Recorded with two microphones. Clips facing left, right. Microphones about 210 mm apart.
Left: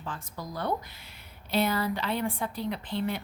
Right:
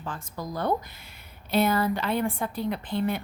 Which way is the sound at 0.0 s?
45° right (ahead or behind).